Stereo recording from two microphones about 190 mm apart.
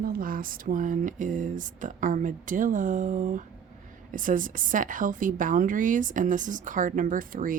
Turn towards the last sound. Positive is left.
turn(degrees=-45)  # may be behind; listen again after turning